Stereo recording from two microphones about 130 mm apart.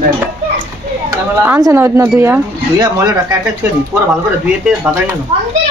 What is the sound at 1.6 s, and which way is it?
Speech, 20° right (ahead or behind).